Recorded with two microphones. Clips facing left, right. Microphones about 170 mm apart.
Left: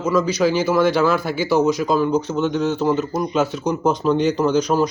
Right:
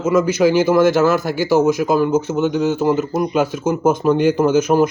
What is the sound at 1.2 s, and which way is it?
Speech, 45° right (ahead or behind).